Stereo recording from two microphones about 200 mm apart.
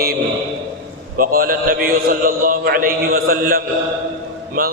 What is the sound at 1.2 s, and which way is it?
A man's voice, 45° right (ahead or behind).